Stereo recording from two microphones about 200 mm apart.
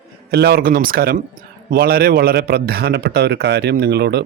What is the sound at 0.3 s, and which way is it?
A man's voice, 55° right (ahead or behind).